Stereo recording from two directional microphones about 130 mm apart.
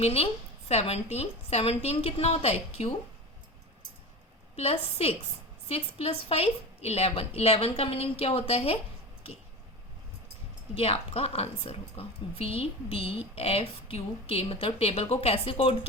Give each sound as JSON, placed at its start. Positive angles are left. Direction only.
{"t": 0.0, "sound": "a woman's voice", "side_deg": 50}
{"t": 4.5, "sound": "a woman's voice", "side_deg": 50}
{"t": 10.8, "sound": "a woman's voice", "side_deg": 50}